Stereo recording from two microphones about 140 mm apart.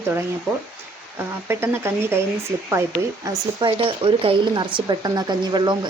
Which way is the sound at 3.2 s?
25° right (ahead or behind).